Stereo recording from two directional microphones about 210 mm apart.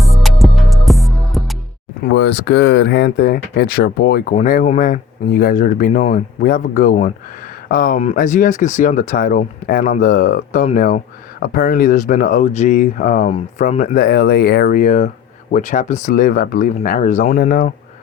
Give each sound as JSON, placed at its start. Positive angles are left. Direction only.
{"t": 0.0, "sound": "music", "side_deg": 0}
{"t": 2.0, "sound": "speech", "side_deg": 55}
{"t": 4.4, "sound": "speech", "side_deg": 40}